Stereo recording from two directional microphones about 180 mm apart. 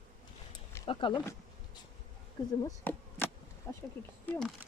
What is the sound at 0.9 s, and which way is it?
Speech, 25° left (ahead or behind).